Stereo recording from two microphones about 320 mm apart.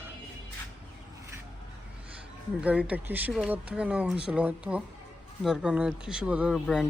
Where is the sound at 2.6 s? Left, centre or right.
Centre.